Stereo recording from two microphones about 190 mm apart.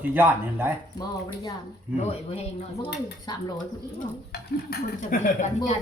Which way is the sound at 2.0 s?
35° left (ahead or behind).